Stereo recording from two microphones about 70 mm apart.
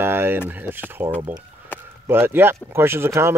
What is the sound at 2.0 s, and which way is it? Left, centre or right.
Speech, right.